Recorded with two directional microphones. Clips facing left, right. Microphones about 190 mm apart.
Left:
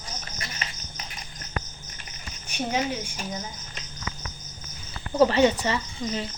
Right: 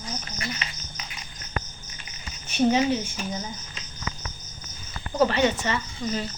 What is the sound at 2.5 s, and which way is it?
Speech, 10° left (ahead or behind).